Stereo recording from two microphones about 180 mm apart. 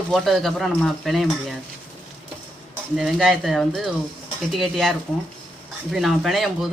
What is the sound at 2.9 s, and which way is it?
Speech, centre (ahead or behind).